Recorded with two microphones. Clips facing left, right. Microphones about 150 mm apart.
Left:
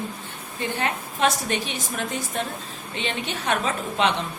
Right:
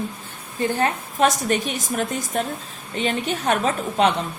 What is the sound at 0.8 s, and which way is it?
A woman's voice, 45° right (ahead or behind).